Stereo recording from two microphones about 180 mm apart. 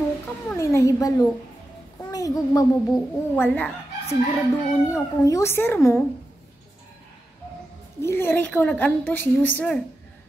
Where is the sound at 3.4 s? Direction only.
10° left (ahead or behind).